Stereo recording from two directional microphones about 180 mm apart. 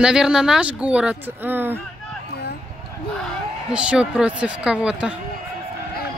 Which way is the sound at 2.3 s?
65° left (ahead or behind).